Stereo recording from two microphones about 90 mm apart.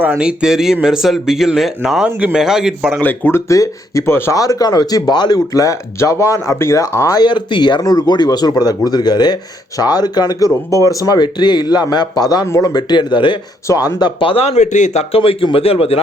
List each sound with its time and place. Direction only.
0.2 s speech: 10° right (ahead or behind)
2.0 s speech: 15° right (ahead or behind)
3.0 s speech: 20° left (ahead or behind)
3.5 s speech: 35° left (ahead or behind)
4.4 s speech: 40° left (ahead or behind)
5.5 s speech: 40° left (ahead or behind)
7.2 s speech: 55° left (ahead or behind); by 12.8 s 40° left (ahead or behind)
12.9 s speech: 55° left (ahead or behind)
13.7 s speech: 40° left (ahead or behind)
14.2 s speech: 75° left (ahead or behind)
15.1 s a man's voice: 90° left